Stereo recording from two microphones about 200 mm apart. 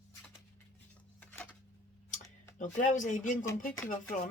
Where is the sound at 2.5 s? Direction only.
40° left (ahead or behind).